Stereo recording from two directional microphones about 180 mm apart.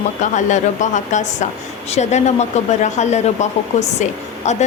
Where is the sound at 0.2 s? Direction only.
45° left (ahead or behind).